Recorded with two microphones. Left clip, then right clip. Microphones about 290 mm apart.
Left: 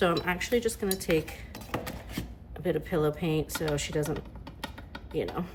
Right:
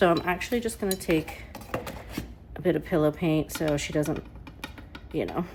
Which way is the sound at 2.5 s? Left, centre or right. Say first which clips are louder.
Right 4 dB; right.